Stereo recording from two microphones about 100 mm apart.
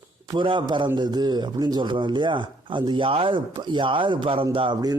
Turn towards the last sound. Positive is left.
turn(degrees=-65)  # may be behind; listen again after turning